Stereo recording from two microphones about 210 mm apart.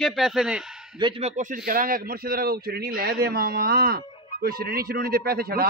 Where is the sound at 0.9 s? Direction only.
25° right (ahead or behind).